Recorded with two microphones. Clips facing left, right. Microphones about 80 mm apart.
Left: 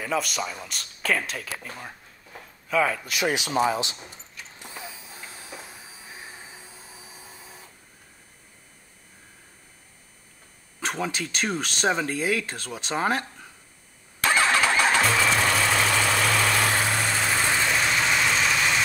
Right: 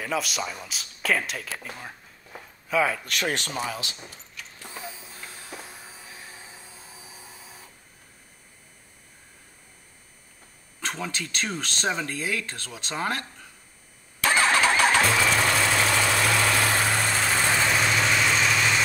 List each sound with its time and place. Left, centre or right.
0.0 s speech: centre
3.5 s speech: left
4.6 s a sound: left
10.8 s speech: centre
14.5 s vehicle: centre
15.1 s vehicle: centre
18.1 s vehicle: centre